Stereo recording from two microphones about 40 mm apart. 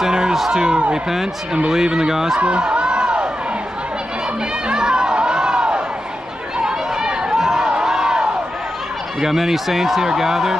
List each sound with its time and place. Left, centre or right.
0.0 s a sound: centre
0.5 s speech: centre
2.3 s snicker: right
4.6 s music: right
6.6 s a sound: centre
9.2 s speech: centre